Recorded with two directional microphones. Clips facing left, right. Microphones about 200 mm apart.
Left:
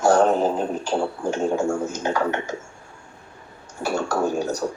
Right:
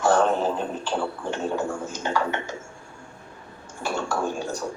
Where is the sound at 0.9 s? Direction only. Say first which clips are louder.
Left 4 dB; 45° left (ahead or behind).